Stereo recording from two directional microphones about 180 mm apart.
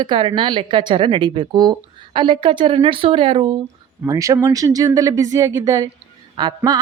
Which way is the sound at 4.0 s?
15° right (ahead or behind).